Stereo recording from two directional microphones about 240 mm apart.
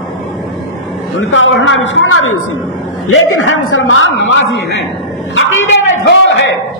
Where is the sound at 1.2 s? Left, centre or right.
Left.